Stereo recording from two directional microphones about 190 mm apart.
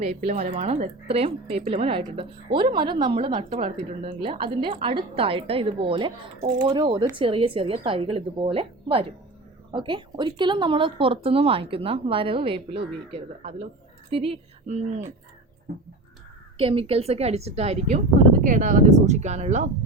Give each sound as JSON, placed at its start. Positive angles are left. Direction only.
{"t": 0.0, "sound": "a woman's voice", "side_deg": -35}
{"t": 16.6, "sound": "a woman's voice", "side_deg": -30}